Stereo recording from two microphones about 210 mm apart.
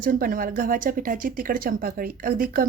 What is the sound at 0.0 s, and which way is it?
Speech, 40° right (ahead or behind).